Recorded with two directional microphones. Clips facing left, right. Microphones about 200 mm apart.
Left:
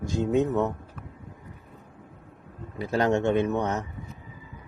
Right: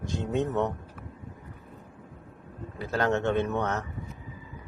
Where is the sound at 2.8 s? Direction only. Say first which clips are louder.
Left 3 dB; 15° left (ahead or behind).